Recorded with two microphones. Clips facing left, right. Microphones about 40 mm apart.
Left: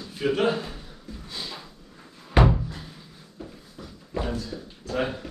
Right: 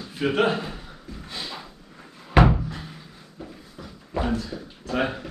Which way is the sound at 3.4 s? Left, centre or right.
Centre.